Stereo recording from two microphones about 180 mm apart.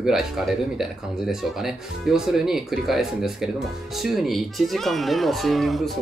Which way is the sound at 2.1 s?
5° right (ahead or behind).